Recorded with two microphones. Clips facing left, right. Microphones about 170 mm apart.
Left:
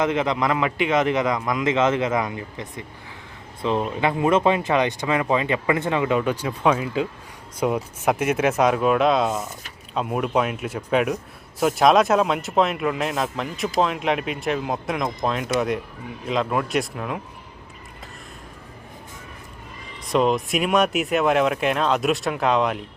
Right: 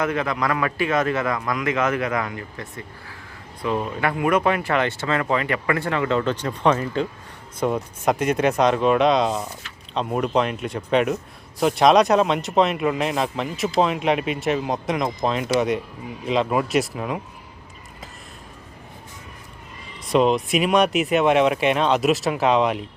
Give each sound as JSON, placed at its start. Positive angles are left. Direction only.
{"t": 0.0, "sound": "a man's voice", "side_deg": 20}
{"t": 20.1, "sound": "speech", "side_deg": 0}